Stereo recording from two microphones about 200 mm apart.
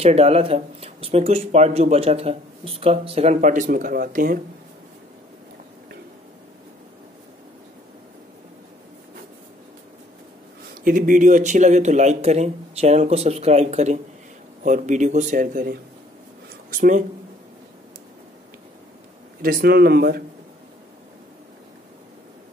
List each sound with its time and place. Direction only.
0.0 s speech: 30° right (ahead or behind)
10.7 s speech: 40° right (ahead or behind)
19.4 s speech: 50° right (ahead or behind)